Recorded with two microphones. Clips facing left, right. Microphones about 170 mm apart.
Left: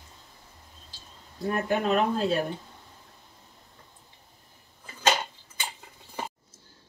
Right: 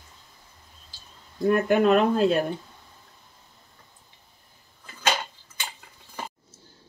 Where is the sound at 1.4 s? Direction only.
65° right (ahead or behind).